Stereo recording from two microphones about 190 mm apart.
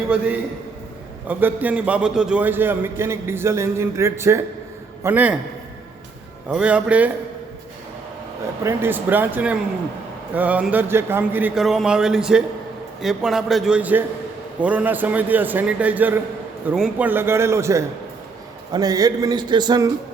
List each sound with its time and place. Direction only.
1.3 s a man's voice: 10° right (ahead or behind)
6.5 s a man's voice: 5° right (ahead or behind)
8.6 s a man's voice: 10° right (ahead or behind)